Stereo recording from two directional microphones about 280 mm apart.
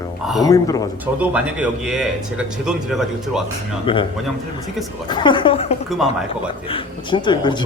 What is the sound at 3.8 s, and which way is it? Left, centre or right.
Speech, centre.